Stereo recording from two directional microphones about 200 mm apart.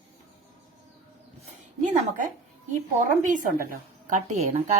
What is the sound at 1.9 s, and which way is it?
A woman's voice, 40° right (ahead or behind).